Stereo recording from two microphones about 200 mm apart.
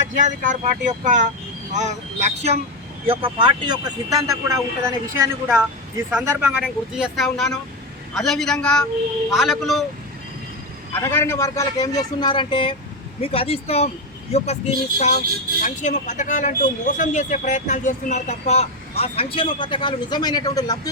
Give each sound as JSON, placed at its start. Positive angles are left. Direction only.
{"t": 0.2, "sound": "a woman's voice", "side_deg": -40}
{"t": 10.9, "sound": "a man's voice", "side_deg": 10}